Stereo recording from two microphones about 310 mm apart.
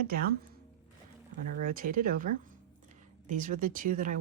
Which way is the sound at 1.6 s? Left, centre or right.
Right.